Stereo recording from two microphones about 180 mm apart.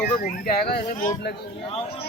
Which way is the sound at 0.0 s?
55° left (ahead or behind).